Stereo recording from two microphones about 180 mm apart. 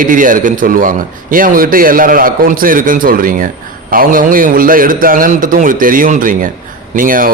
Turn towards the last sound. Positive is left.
turn(degrees=-50)  # may be behind; listen again after turning